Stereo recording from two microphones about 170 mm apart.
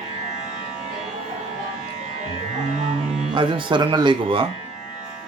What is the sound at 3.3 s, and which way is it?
Speech, 30° right (ahead or behind).